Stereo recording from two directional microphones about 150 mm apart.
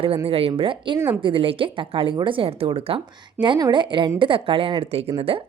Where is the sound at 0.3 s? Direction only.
40° right (ahead or behind).